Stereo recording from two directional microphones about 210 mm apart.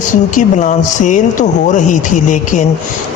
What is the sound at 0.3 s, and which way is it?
Speech, 35° left (ahead or behind).